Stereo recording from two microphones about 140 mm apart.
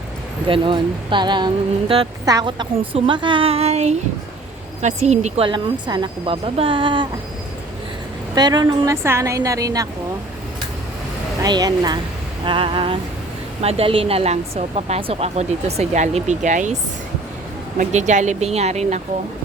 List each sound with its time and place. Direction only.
0.4 s a woman's voice: 35° right (ahead or behind); by 5.5 s 50° right (ahead or behind)
5.5 s a woman's voice: 35° right (ahead or behind)
8.4 s a woman's voice: 30° right (ahead or behind)
9.0 s a woman's voice: 20° right (ahead or behind)
11.4 s a woman's voice: 30° right (ahead or behind); by 16.7 s 60° right (ahead or behind)
17.7 s speech: 60° right (ahead or behind)